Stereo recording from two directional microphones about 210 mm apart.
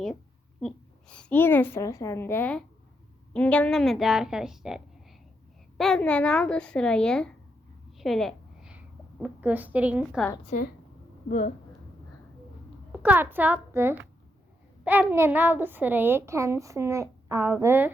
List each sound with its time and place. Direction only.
0.6 s a child's voice: 5° left (ahead or behind)
10.5 s speech: 35° left (ahead or behind)
12.9 s a child's voice: 5° right (ahead or behind)
15.1 s a woman's voice: 10° right (ahead or behind)